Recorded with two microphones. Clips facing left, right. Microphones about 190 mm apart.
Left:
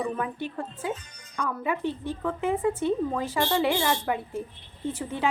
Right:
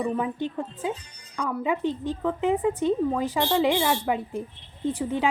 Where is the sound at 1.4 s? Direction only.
15° right (ahead or behind).